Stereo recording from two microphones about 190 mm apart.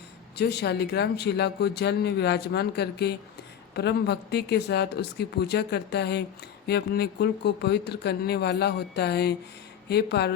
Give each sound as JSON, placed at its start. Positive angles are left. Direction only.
{"t": 0.3, "sound": "speech", "side_deg": 60}